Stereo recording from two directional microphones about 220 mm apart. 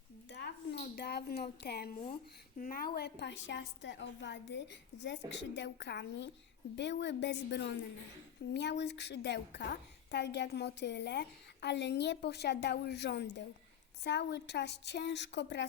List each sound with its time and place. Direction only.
0.3 s a woman's voice: 50° left (ahead or behind)